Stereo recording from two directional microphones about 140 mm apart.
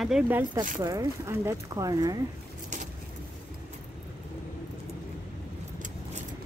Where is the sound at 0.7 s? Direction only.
25° right (ahead or behind).